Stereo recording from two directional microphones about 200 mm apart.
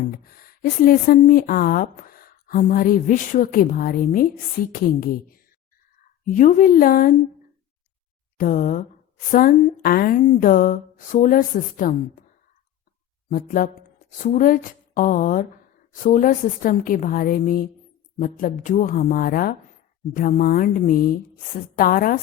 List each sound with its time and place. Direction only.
0.1 s a woman's voice: 45° left (ahead or behind)
8.4 s a woman's voice: 45° left (ahead or behind)
13.3 s a woman's voice: 45° left (ahead or behind)